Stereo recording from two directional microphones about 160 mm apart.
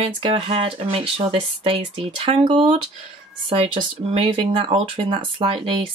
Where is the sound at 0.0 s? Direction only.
35° right (ahead or behind).